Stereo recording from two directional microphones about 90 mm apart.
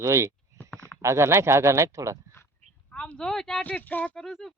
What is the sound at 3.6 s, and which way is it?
Speech, 20° left (ahead or behind).